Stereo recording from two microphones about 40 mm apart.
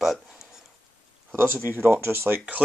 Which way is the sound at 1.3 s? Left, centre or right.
Right.